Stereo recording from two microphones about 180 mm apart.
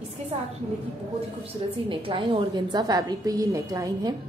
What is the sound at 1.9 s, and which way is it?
A woman's voice, 30° right (ahead or behind).